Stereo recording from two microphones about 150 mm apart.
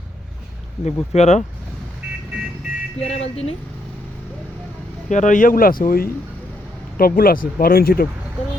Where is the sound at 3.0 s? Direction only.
45° left (ahead or behind).